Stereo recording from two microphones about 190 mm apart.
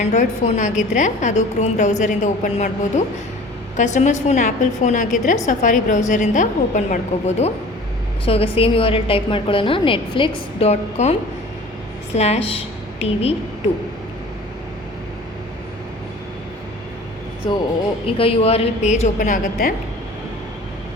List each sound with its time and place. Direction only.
0.0 s a woman's voice: 40° left (ahead or behind)
12.1 s a woman's voice: 35° left (ahead or behind)
17.5 s a woman's voice: 25° left (ahead or behind); by 19.7 s 45° left (ahead or behind)